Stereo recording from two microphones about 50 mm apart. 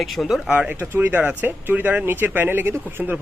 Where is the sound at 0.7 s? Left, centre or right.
Right.